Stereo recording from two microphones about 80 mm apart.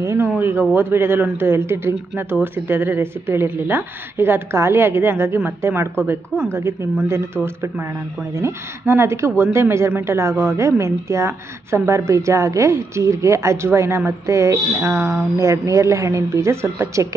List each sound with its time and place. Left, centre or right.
0.0 s speech: right